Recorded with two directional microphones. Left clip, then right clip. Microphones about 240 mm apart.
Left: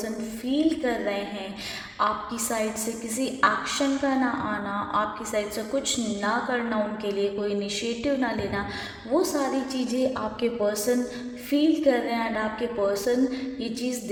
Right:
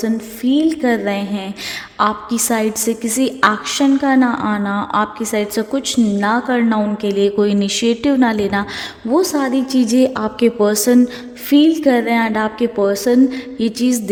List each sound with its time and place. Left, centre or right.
0.0 s a woman's voice: right